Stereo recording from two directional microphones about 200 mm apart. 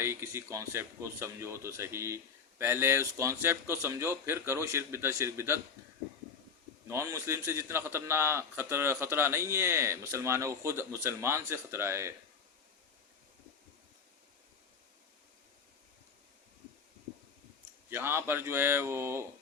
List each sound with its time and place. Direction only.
0.0 s speech: 10° right (ahead or behind)
6.8 s speech: 15° right (ahead or behind)
17.8 s speech: 10° right (ahead or behind)